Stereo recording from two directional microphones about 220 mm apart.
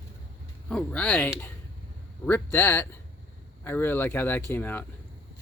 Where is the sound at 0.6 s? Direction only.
5° left (ahead or behind).